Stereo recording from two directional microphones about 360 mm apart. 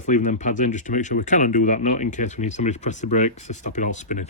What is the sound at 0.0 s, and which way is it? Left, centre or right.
Speech, centre.